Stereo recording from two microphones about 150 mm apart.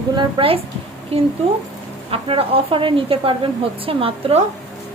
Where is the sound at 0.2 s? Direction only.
35° right (ahead or behind).